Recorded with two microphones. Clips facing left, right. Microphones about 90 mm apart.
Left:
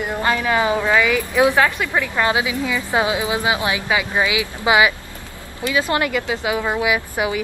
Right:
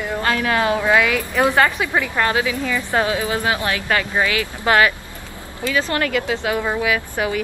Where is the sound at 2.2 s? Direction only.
15° left (ahead or behind).